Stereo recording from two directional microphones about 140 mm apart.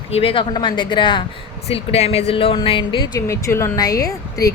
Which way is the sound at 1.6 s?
45° left (ahead or behind).